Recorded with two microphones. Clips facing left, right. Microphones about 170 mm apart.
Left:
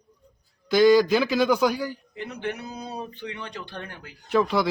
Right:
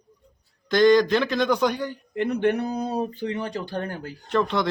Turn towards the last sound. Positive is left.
turn(degrees=5)  # may be behind; listen again after turning